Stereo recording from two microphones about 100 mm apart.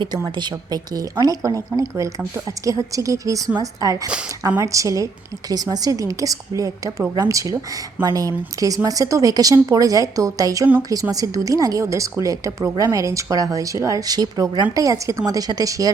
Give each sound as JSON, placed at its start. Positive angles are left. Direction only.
{"t": 0.3, "sound": "a woman's voice", "side_deg": -40}